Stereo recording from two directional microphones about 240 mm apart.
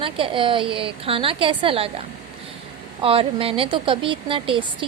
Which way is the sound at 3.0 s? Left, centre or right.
Right.